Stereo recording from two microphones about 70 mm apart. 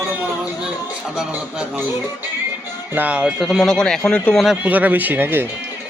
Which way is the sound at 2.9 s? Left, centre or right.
Centre.